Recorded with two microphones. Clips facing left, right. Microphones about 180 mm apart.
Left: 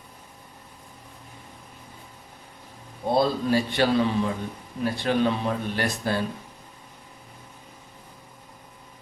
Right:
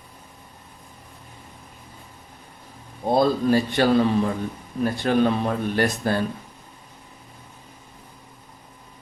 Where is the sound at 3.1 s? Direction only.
45° right (ahead or behind).